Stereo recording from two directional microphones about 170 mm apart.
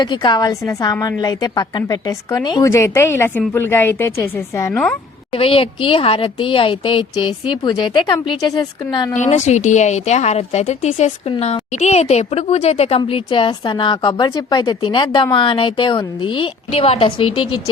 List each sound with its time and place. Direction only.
0.0 s speech: 25° left (ahead or behind)
5.3 s speech: 30° left (ahead or behind)
9.1 s a woman's voice: 45° left (ahead or behind)